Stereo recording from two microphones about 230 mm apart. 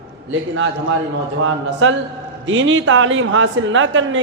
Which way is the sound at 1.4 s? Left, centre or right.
Right.